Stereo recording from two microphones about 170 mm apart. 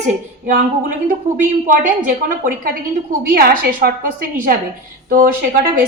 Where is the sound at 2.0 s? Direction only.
55° right (ahead or behind).